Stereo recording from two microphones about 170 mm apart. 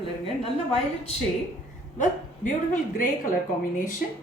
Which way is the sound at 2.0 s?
50° left (ahead or behind).